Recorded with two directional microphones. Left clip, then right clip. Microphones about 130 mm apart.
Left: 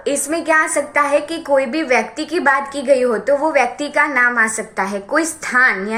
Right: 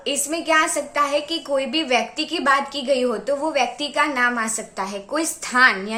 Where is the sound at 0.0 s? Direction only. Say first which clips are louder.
Left 5 dB; 10° right (ahead or behind).